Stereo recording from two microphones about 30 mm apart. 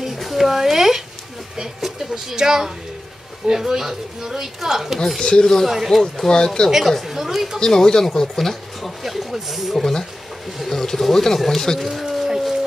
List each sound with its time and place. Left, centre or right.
0.0 s a sound: centre
1.8 s speech: centre
5.2 s speech: left
5.9 s speech: centre
6.2 s speech: left
7.0 s speech: centre
7.6 s speech: left
9.0 s speech: centre
9.8 s speech: centre
11.8 s a sound: centre